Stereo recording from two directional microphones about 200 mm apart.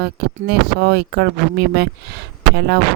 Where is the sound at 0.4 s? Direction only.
55° right (ahead or behind).